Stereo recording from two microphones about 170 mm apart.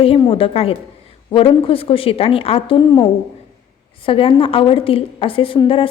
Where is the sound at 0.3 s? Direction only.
35° left (ahead or behind).